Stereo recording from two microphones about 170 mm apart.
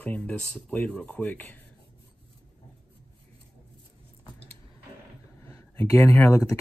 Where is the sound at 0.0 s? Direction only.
10° left (ahead or behind).